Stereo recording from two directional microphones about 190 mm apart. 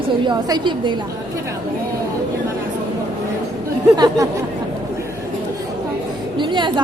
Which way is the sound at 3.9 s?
20° right (ahead or behind).